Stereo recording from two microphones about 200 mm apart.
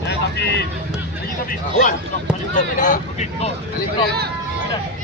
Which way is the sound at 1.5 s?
45° left (ahead or behind).